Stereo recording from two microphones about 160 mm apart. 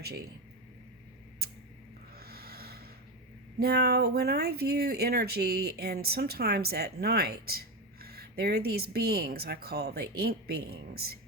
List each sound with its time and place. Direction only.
0.0 s speech: 80° right
2.1 s snort: 75° right (ahead or behind)
3.6 s speech: 80° right